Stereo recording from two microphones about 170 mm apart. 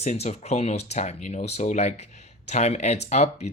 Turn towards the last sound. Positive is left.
turn(degrees=40)  # may be behind; listen again after turning